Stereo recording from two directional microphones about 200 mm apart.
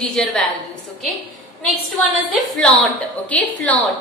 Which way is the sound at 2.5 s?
5° left (ahead or behind).